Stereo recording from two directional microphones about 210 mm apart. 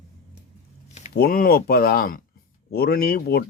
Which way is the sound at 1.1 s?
45° left (ahead or behind).